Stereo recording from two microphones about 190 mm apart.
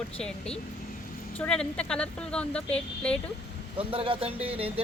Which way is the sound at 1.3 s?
5° left (ahead or behind).